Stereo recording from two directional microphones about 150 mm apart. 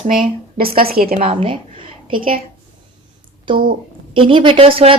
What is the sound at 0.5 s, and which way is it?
Speech, 85° right.